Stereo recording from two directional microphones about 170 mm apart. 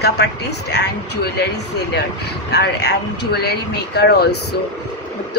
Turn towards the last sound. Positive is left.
turn(degrees=70)  # may be behind; listen again after turning